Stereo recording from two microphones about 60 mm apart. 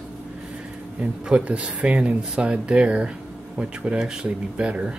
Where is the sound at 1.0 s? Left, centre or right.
Centre.